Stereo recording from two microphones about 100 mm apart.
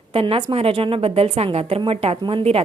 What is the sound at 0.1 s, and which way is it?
A woman's voice, 70° right (ahead or behind).